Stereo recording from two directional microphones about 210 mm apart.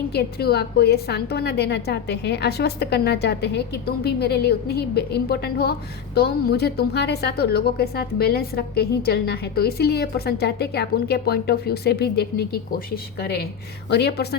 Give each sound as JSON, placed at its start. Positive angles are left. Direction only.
{"t": 0.1, "sound": "a woman's voice", "side_deg": 50}